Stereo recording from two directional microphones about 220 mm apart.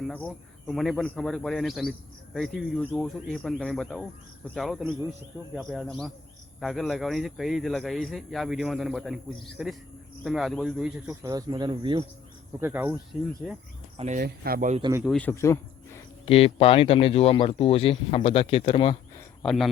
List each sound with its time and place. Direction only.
0.1 s speech: 5° left (ahead or behind); by 12.0 s 20° right (ahead or behind)
12.5 s speech: 10° right (ahead or behind)
13.9 s speech: 30° right (ahead or behind)
14.2 s speech: 45° right (ahead or behind)
14.8 s a man's voice: 20° right (ahead or behind)
15.0 s speech: 5° left (ahead or behind)
16.2 s speech: 25° left (ahead or behind)
19.4 s speech: centre (ahead or behind)